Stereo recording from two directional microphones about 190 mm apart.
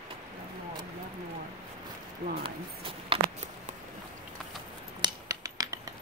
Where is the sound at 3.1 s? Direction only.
25° right (ahead or behind).